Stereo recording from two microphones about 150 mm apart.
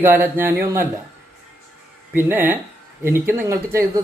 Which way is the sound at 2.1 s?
15° right (ahead or behind).